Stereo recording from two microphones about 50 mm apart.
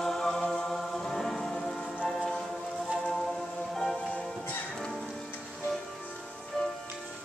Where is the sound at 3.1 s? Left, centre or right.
Centre.